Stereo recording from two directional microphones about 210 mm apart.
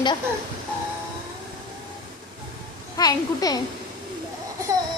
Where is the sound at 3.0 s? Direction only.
20° left (ahead or behind).